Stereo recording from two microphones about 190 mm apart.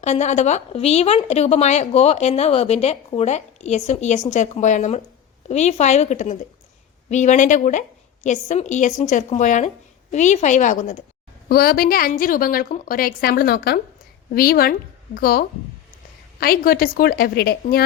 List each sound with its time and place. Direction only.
0.0 s speech: 35° left (ahead or behind)
11.4 s a woman's voice: 50° left (ahead or behind)